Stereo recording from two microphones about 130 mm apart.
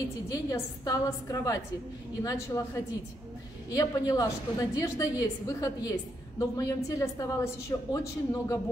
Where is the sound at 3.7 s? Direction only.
25° left (ahead or behind).